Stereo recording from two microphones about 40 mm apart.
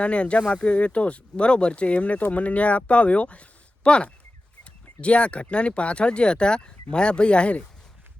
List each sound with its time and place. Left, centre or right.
0.0 s speech: left